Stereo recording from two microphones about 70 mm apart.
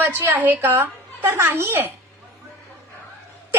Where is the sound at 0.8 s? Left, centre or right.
Right.